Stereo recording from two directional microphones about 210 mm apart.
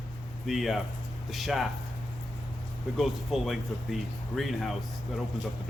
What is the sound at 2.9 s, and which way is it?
Speech, centre (ahead or behind).